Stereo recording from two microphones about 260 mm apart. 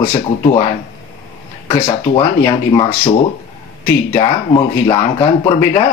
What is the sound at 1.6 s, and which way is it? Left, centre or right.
Speech, centre.